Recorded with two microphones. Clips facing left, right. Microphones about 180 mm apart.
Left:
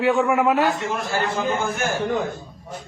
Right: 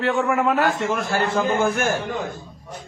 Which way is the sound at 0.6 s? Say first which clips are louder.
Right 1 dB; 55° right (ahead or behind).